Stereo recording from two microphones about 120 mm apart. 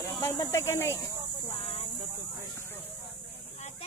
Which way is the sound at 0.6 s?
25° left (ahead or behind).